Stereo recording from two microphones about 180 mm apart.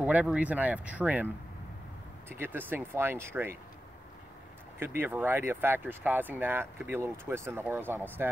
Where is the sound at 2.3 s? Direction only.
10° right (ahead or behind).